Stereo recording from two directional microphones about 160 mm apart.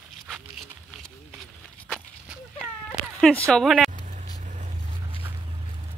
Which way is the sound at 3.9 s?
50° right (ahead or behind).